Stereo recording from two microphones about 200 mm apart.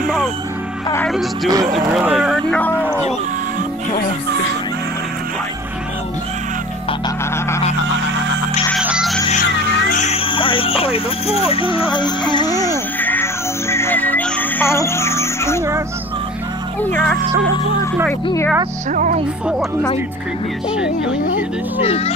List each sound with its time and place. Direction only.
1.0 s speech: centre (ahead or behind)
1.5 s speech: 20° right (ahead or behind)
2.0 s speech: centre (ahead or behind)
8.7 s music: 5° right (ahead or behind)
9.9 s speech: 30° left (ahead or behind)
11.9 s music: 20° left (ahead or behind)
16.9 s speech: 5° left (ahead or behind)
18.2 s speech: 15° left (ahead or behind)
18.9 s music: 40° right (ahead or behind)
21.8 s speech: 30° left (ahead or behind)